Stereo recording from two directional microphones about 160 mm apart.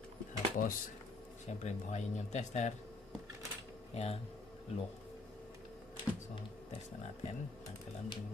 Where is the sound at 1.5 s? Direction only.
45° left (ahead or behind).